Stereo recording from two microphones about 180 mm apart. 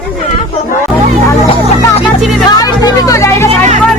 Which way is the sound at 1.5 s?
30° left (ahead or behind).